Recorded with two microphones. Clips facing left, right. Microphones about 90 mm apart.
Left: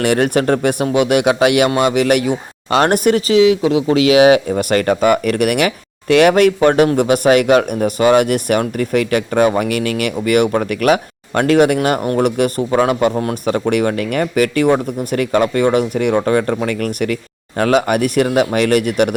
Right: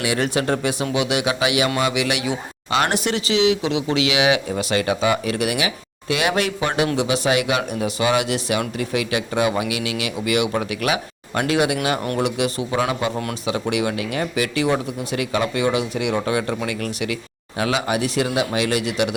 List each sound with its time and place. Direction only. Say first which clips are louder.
0.0 s speech: left 7 dB; 55° left (ahead or behind)